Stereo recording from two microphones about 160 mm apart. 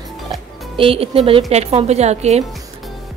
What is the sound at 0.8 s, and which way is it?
A woman's voice, 35° right (ahead or behind).